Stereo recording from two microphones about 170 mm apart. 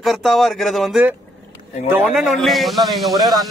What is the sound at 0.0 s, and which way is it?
Speech, centre (ahead or behind).